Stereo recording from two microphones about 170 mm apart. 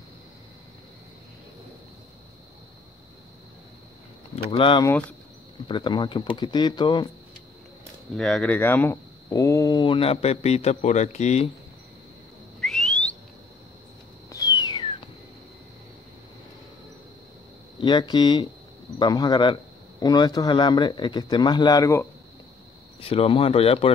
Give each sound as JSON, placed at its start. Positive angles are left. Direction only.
{"t": 4.5, "sound": "speech", "side_deg": 30}
{"t": 8.2, "sound": "speech", "side_deg": 5}
{"t": 12.5, "sound": "whistling", "side_deg": 0}
{"t": 14.3, "sound": "a sound", "side_deg": 20}
{"t": 17.7, "sound": "speech", "side_deg": 25}
{"t": 22.9, "sound": "speech", "side_deg": 35}